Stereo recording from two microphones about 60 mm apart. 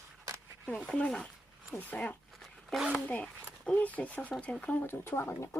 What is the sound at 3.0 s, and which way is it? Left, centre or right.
Speech, left.